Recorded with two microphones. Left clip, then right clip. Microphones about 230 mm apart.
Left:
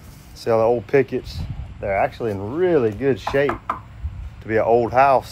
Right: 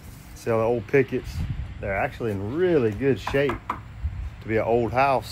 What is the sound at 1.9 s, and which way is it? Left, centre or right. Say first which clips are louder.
Speech: left 6 dB; left.